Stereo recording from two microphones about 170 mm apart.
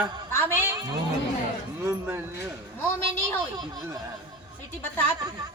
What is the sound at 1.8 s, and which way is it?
Speech, 15° right (ahead or behind).